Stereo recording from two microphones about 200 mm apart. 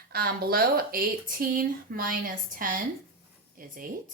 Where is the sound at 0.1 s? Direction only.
50° right (ahead or behind).